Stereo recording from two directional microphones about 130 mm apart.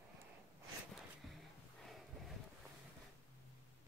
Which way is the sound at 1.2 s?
Centre (ahead or behind).